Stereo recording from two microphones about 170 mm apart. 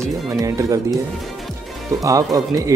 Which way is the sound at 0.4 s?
20° right (ahead or behind).